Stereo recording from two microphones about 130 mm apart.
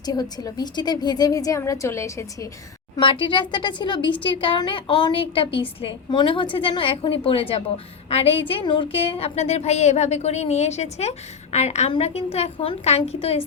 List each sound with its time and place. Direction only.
0.0 s a woman's voice: 30° left (ahead or behind)
2.9 s a woman's voice: 40° left (ahead or behind)